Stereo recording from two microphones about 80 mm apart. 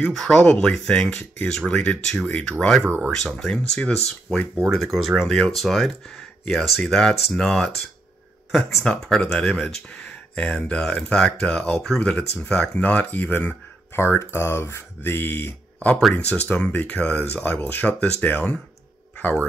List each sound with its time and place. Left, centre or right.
0.1 s speech: centre
2.8 s speech: centre
3.1 s speech: centre; by 15.9 s left
16.4 s speech: centre